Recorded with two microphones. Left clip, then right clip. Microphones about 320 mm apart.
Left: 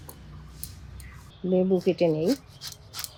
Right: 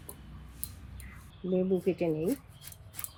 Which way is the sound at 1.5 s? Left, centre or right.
Left.